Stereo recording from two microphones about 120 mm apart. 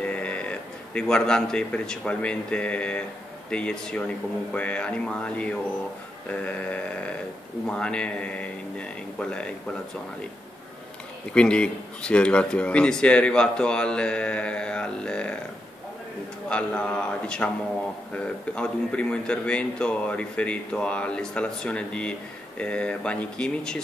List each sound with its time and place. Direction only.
0.0 s speech: 10° left (ahead or behind)
11.3 s speech: 10° left (ahead or behind)
16.4 s speech: 10° left (ahead or behind)